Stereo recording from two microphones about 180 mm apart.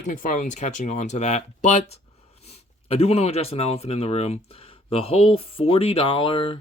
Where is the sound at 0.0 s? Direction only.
45° left (ahead or behind).